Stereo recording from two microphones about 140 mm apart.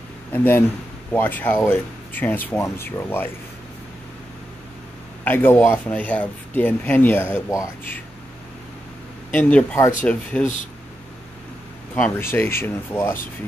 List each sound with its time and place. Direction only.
0.3 s speech: 15° left (ahead or behind)
5.2 s speech: 15° left (ahead or behind)
9.3 s speech: 10° left (ahead or behind)
11.9 s speech: 15° left (ahead or behind)